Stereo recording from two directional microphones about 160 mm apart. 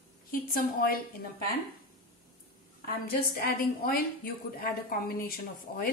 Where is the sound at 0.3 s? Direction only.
65° left (ahead or behind).